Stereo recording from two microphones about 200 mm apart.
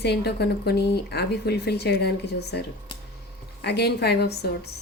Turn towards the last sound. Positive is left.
turn(degrees=55)  # may be behind; listen again after turning